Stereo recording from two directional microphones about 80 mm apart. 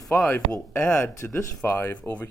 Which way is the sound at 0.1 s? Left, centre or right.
Centre.